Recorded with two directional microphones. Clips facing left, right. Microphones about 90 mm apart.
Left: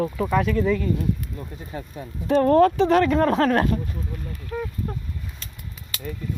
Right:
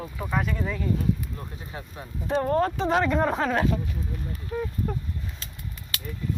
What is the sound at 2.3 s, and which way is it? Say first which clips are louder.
Speech: left 7 dB; 90° left.